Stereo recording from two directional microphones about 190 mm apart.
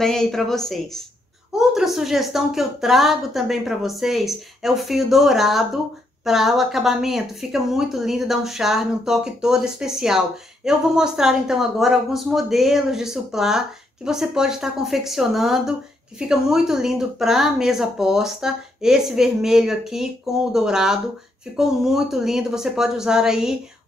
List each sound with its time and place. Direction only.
0.0 s speech: centre (ahead or behind)